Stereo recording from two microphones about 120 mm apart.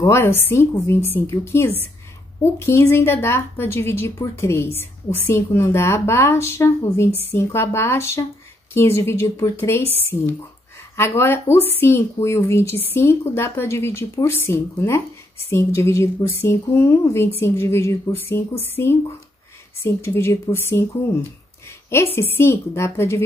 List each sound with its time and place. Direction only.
0.0 s a woman's voice: 20° left (ahead or behind)
19.8 s a woman's voice: 20° left (ahead or behind)
22.1 s a woman's voice: 20° left (ahead or behind)